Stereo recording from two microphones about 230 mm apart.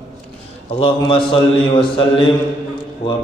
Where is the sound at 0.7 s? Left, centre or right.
Left.